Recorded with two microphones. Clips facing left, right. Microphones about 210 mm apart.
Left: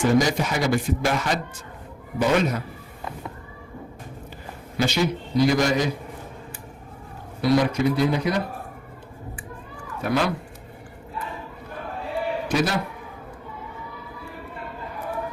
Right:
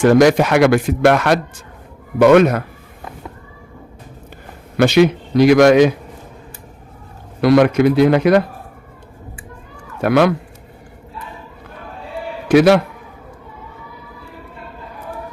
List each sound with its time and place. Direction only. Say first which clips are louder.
0.0 s speech: right 9 dB; 75° right (ahead or behind)
4.8 s a man's voice: right 11 dB; 75° right (ahead or behind)
7.4 s speech: right 8 dB; 70° right (ahead or behind)
10.0 s speech: right 10 dB; 70° right (ahead or behind)
12.5 s speech: right 15 dB; 75° right (ahead or behind)